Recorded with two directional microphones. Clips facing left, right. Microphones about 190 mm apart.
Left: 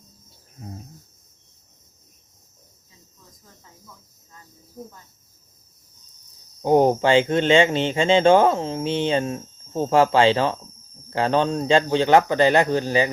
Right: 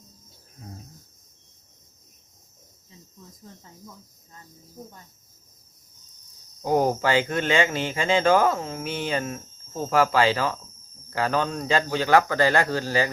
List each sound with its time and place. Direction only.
6.6 s speech: 25° left (ahead or behind)